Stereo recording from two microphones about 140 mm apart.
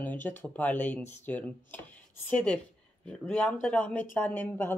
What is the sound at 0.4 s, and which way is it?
Speech, 10° left (ahead or behind).